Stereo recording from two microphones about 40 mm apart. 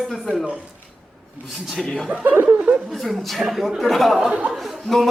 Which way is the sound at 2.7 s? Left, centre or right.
Right.